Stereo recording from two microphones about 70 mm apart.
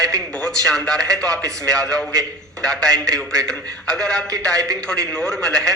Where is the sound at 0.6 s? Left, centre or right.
Centre.